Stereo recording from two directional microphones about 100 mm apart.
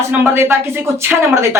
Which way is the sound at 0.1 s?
20° right (ahead or behind).